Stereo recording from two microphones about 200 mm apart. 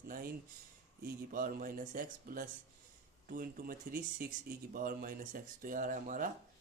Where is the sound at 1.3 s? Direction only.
45° right (ahead or behind).